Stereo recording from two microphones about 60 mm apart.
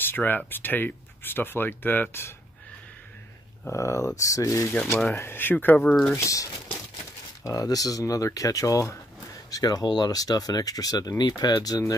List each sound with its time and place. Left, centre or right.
0.0 s speech: left
3.6 s speech: left
4.7 s speech: left
5.2 s speech: left
6.1 s speech: left
7.4 s speech: left